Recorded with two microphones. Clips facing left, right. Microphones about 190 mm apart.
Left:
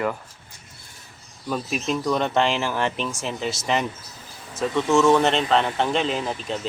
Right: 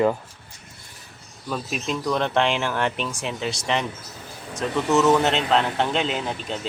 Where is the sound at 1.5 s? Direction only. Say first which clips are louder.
Left 2 dB; centre (ahead or behind).